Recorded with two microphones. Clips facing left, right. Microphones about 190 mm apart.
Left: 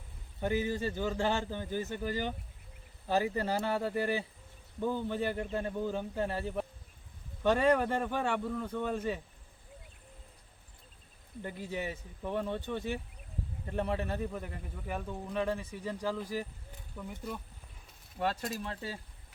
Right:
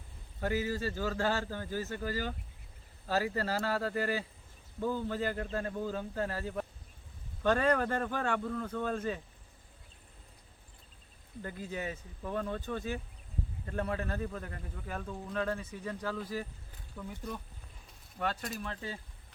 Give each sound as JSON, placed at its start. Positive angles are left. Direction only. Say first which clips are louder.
{"t": 0.3, "sound": "speech", "louder": "left 1 dB", "side_deg": 20}
{"t": 11.4, "sound": "speech", "louder": "left 1 dB", "side_deg": 15}
{"t": 18.2, "sound": "speech", "louder": "left 2 dB", "side_deg": 25}